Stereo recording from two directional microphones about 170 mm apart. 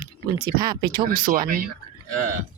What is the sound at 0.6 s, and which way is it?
Speech, 25° right (ahead or behind).